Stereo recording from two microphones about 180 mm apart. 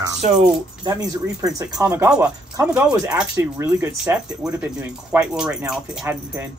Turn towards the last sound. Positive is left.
turn(degrees=-5)  # may be behind; listen again after turning